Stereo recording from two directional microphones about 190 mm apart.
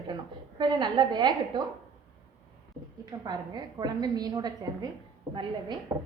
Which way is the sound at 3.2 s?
20° right (ahead or behind).